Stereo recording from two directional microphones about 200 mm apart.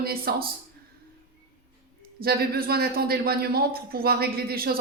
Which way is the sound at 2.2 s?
50° right (ahead or behind).